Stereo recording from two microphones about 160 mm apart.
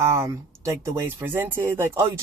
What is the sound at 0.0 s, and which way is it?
Speech, 15° right (ahead or behind).